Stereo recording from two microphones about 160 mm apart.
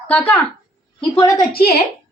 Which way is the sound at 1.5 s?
70° left (ahead or behind).